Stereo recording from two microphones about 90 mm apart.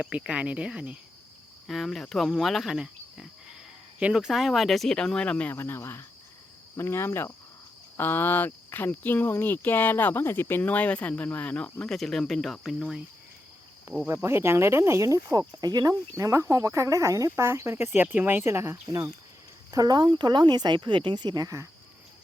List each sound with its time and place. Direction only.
0.0 s speech: 10° right (ahead or behind)
1.6 s speech: centre (ahead or behind)
5.5 s speech: 25° left (ahead or behind); by 13.0 s centre (ahead or behind)
14.1 s speech: 30° right (ahead or behind)
19.7 s speech: 50° right (ahead or behind)